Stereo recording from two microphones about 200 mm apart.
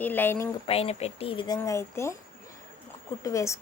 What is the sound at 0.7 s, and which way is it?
Speech, 30° left (ahead or behind).